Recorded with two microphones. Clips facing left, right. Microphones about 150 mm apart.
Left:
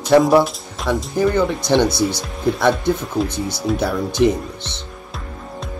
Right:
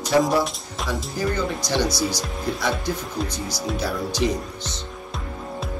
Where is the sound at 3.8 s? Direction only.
55° left (ahead or behind).